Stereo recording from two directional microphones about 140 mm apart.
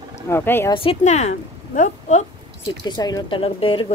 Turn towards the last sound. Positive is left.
turn(degrees=40)  # may be behind; listen again after turning